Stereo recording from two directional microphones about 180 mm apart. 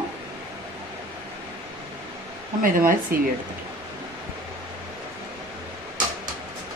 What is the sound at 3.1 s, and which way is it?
Speech, 55° right (ahead or behind).